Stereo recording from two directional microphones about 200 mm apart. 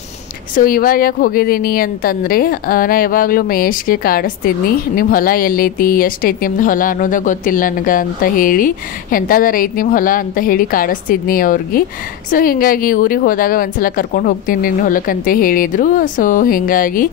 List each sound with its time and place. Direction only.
0.6 s a woman's voice: 45° left (ahead or behind)